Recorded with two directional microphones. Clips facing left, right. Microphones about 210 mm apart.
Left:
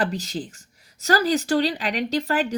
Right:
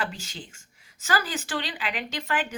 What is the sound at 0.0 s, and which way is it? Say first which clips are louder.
Speech: left 8 dB; 40° left (ahead or behind).